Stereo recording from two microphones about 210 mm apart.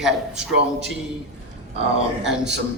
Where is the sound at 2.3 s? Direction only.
55° right (ahead or behind).